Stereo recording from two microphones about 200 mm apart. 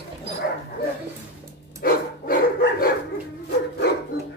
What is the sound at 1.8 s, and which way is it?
Dog, 45° left (ahead or behind).